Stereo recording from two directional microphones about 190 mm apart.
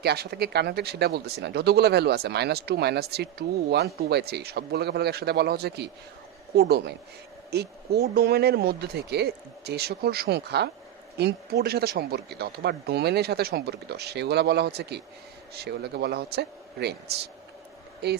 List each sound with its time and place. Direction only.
0.0 s speech: 60° right (ahead or behind)